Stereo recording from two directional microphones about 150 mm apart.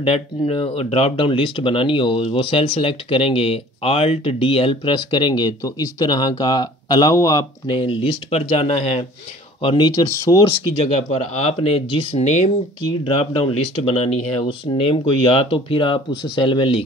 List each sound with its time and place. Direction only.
0.0 s speech: 40° left (ahead or behind)
10.0 s speech: 20° left (ahead or behind)
10.9 s speech: 45° left (ahead or behind)